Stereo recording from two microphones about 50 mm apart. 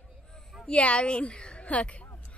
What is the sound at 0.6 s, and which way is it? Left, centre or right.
A woman's voice, left.